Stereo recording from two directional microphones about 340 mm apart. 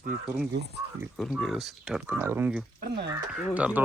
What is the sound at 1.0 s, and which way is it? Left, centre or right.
Speech, centre.